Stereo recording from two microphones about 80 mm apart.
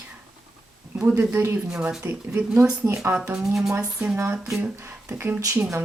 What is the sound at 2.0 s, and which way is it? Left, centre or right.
Speech, right.